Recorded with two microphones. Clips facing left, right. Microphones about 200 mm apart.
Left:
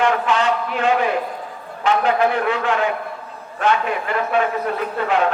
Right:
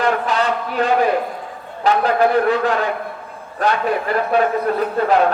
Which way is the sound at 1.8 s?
35° right (ahead or behind).